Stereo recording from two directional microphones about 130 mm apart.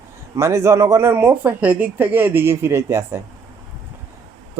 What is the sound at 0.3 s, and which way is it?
Speech, 20° right (ahead or behind).